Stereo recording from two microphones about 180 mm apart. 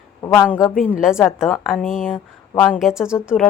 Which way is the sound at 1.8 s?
50° left (ahead or behind).